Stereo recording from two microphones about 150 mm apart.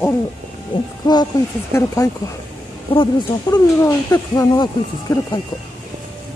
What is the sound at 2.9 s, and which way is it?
Speech, 35° left (ahead or behind).